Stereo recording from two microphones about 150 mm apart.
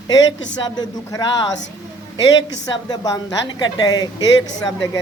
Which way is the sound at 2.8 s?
25° left (ahead or behind).